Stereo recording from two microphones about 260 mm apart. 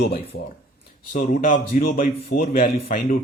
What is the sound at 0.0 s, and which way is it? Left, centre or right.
Speech, left.